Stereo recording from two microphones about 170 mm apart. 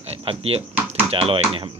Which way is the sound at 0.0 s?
35° right (ahead or behind).